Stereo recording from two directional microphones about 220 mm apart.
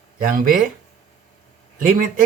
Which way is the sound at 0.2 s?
40° right (ahead or behind).